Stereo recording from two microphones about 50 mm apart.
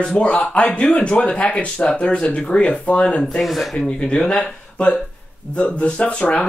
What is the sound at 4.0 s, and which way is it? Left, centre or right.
Speech, centre.